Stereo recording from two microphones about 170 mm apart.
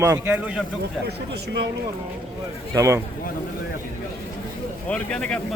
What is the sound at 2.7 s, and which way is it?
Speech, 15° right (ahead or behind).